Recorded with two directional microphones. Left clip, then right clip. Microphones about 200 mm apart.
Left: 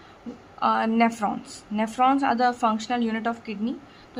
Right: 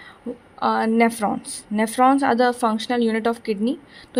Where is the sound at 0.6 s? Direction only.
20° right (ahead or behind).